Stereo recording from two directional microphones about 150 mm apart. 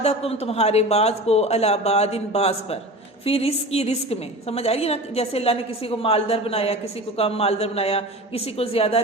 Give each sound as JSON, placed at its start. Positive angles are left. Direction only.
{"t": 0.0, "sound": "a man's voice", "side_deg": 45}